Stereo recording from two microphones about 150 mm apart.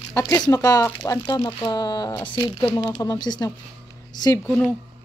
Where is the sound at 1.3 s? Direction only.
25° left (ahead or behind).